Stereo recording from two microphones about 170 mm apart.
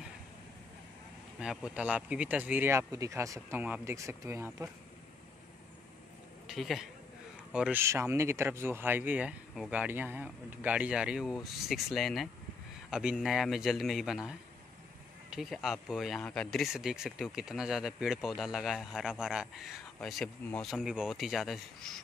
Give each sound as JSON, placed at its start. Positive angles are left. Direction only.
{"t": 1.4, "sound": "speech", "side_deg": -5}
{"t": 6.4, "sound": "speech", "side_deg": 0}
{"t": 7.8, "sound": "speech", "side_deg": -15}
{"t": 15.3, "sound": "speech", "side_deg": 0}